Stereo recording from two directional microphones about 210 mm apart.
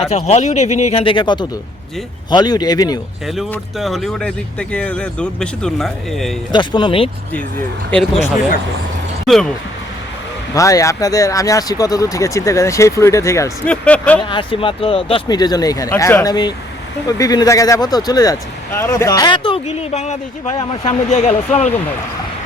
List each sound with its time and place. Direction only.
0.0 s speech: 30° left (ahead or behind)
3.2 s speech: centre (ahead or behind)
6.5 s speech: 20° left (ahead or behind)
7.9 s speech: 5° left (ahead or behind)
9.2 s speech: centre (ahead or behind)
10.5 s speech: 15° left (ahead or behind)
14.2 s speech: 25° left (ahead or behind)